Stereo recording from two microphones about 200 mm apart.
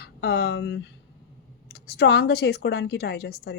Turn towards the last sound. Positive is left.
turn(degrees=55)  # may be behind; listen again after turning